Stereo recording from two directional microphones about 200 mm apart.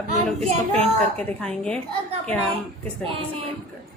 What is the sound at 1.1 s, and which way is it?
Speech, 5° left (ahead or behind).